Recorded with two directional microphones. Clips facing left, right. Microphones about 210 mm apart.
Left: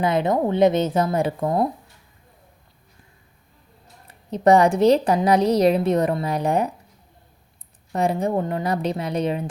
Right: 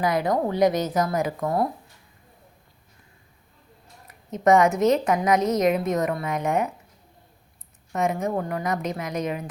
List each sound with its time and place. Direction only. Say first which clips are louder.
0.0 s a woman's voice: left 3 dB; 25° left (ahead or behind)
4.0 s a woman's voice: left 3 dB; 30° left (ahead or behind)
7.9 s a woman's voice: left 3 dB; 30° left (ahead or behind)